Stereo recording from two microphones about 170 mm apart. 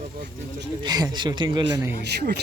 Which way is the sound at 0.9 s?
25° right (ahead or behind).